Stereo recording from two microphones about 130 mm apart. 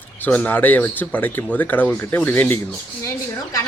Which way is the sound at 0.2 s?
15° left (ahead or behind).